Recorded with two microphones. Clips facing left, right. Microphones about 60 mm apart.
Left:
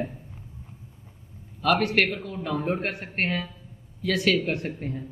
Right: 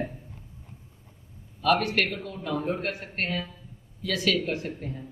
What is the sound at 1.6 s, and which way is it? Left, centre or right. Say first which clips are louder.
A woman's voice: left 2 dB; left.